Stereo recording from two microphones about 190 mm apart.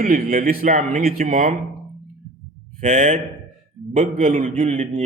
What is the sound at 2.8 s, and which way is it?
A man's voice, 45° right (ahead or behind).